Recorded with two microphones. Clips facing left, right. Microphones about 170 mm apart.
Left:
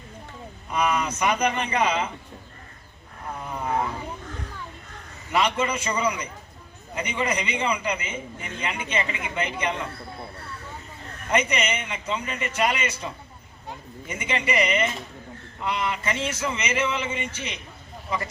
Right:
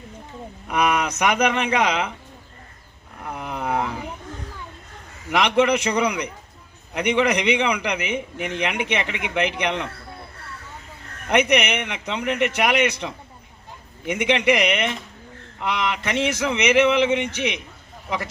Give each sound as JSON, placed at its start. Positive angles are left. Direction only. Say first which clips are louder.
{"t": 0.7, "sound": "a man's voice", "louder": "right 3 dB", "side_deg": -75}
{"t": 3.3, "sound": "a sound", "louder": "right 2 dB", "side_deg": -75}
{"t": 5.3, "sound": "a man's voice", "louder": "right 6 dB", "side_deg": -75}
{"t": 11.3, "sound": "a man's voice", "louder": "right 5 dB", "side_deg": -70}